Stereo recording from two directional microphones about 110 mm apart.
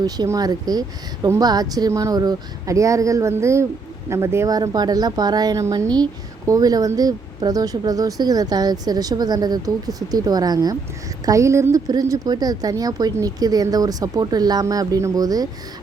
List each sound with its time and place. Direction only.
0.3 s speech: 35° right (ahead or behind)
4.5 s speech: 35° right (ahead or behind)